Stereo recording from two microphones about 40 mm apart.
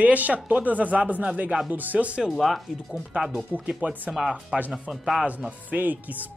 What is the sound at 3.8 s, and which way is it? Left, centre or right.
Speech, right.